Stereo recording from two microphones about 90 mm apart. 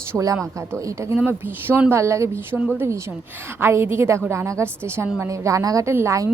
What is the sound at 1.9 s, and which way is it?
A woman's voice, 35° right (ahead or behind).